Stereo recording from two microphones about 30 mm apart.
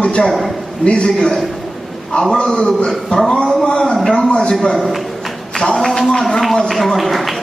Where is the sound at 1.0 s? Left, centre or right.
Left.